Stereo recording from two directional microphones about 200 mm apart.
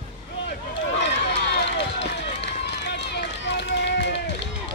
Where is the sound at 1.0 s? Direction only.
60° left (ahead or behind).